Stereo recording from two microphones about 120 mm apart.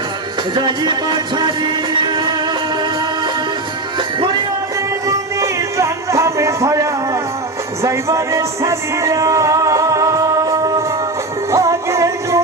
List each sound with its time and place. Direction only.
0.5 s music: 40° right (ahead or behind)
5.0 s music: 25° right (ahead or behind)